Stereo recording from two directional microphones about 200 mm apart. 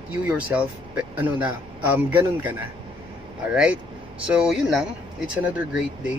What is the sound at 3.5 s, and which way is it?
Speech, 5° right (ahead or behind).